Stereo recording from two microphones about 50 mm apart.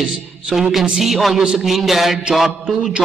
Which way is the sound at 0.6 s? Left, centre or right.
Centre.